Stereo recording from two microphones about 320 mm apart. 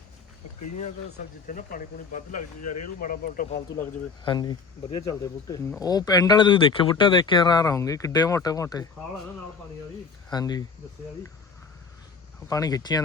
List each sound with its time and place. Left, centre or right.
0.8 s speech: left
2.4 s speech: left
2.8 s speech: left
4.3 s speech: centre
10.3 s speech: centre
12.5 s speech: centre